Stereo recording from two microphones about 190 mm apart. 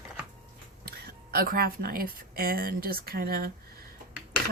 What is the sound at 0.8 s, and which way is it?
Speech, 60° right (ahead or behind).